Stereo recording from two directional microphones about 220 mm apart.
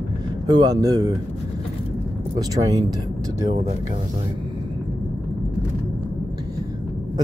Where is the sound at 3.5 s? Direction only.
25° right (ahead or behind).